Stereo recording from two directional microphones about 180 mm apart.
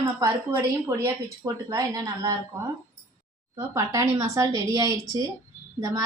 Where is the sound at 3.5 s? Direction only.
20° right (ahead or behind).